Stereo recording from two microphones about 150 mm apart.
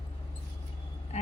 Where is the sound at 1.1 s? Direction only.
50° left (ahead or behind).